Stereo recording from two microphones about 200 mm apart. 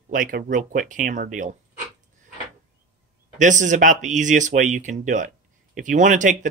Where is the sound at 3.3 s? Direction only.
40° right (ahead or behind).